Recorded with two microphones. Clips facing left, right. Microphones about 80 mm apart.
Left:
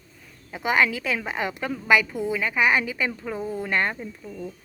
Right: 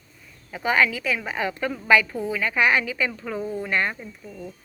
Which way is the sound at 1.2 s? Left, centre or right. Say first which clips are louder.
Right 2 dB; centre.